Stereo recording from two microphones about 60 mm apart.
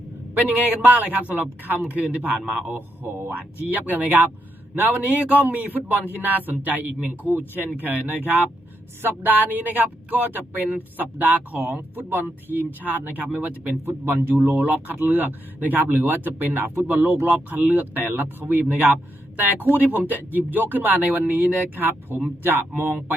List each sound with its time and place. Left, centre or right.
0.4 s a man's voice: right
2.7 s a man's voice: right